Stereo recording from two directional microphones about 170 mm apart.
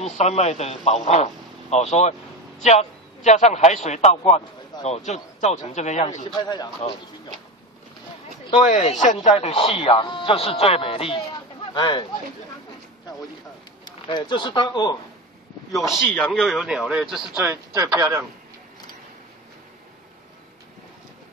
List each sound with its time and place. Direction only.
0.0 s speech: 40° left (ahead or behind)
6.2 s speech: 25° left (ahead or behind)
8.6 s speech: 45° left (ahead or behind); by 12.1 s 30° left (ahead or behind)
13.8 s speech: 25° left (ahead or behind)
15.7 s speech: centre (ahead or behind)
17.4 s speech: 15° right (ahead or behind)